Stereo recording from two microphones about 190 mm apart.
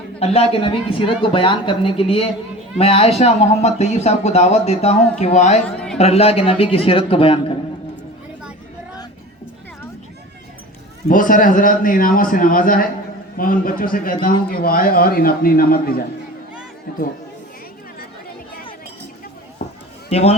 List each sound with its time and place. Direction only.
0.2 s speech: 30° left (ahead or behind)
11.1 s a man's voice: 45° left (ahead or behind)
20.1 s speech: 35° left (ahead or behind)